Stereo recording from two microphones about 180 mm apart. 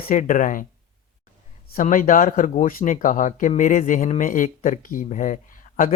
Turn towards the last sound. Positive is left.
turn(degrees=45)  # may be behind; listen again after turning